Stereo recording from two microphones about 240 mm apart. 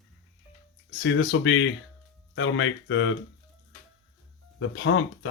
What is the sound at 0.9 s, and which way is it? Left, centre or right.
Speech, left.